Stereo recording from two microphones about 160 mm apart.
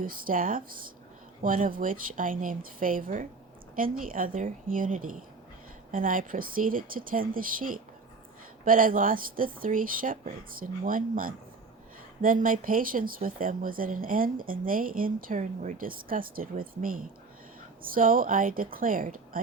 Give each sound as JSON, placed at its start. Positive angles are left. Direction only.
{"t": 0.0, "sound": "speech", "side_deg": -60}